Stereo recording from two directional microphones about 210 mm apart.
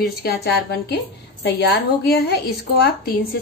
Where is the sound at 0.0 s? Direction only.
50° left (ahead or behind).